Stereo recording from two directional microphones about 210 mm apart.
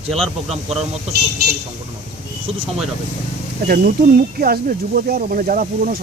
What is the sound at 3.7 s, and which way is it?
Speech, 45° right (ahead or behind).